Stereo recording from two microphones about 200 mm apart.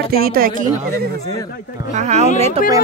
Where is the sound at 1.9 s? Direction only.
35° right (ahead or behind).